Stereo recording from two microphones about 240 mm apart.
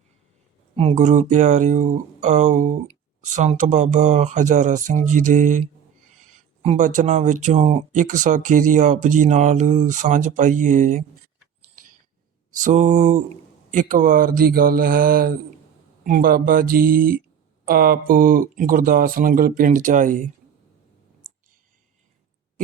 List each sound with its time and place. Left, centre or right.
0.8 s speech: right
6.6 s speech: right
12.6 s speech: right